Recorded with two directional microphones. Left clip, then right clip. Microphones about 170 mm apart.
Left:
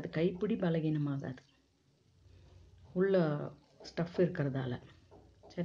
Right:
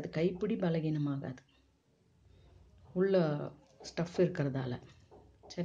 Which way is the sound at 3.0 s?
5° left (ahead or behind).